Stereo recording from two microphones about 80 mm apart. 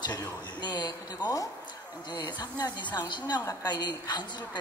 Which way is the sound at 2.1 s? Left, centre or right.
Left.